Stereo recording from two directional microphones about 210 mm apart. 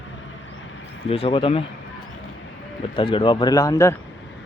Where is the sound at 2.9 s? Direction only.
25° left (ahead or behind).